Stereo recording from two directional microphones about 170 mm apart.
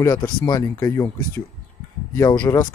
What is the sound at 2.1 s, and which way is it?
Speech, 20° left (ahead or behind).